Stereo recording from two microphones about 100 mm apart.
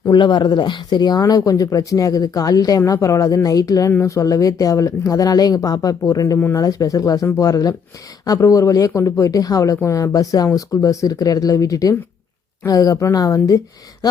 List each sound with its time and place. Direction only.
0.1 s speech: 50° left (ahead or behind); by 13.6 s 35° left (ahead or behind)